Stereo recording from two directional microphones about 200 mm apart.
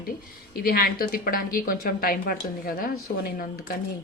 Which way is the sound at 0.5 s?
50° left (ahead or behind).